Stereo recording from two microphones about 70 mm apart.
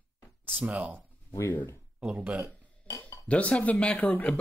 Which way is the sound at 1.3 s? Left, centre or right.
Left.